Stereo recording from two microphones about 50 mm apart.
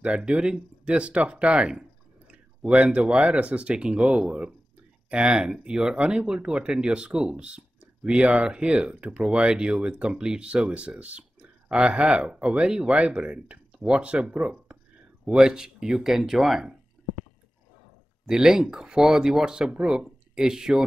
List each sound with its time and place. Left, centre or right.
0.0 s speech: right
14.4 s speech: centre
18.2 s speech: centre